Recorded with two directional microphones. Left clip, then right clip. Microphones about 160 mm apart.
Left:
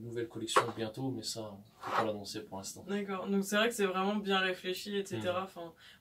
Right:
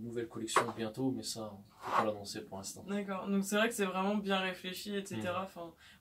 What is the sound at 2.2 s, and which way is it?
Speech, 15° left (ahead or behind).